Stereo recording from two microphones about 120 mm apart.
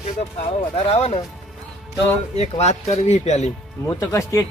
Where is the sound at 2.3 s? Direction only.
65° left (ahead or behind).